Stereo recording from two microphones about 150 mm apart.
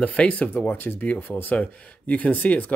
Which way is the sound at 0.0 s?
10° left (ahead or behind).